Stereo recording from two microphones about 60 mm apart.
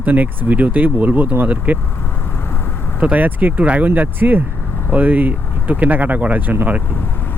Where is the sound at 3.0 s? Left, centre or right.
Right.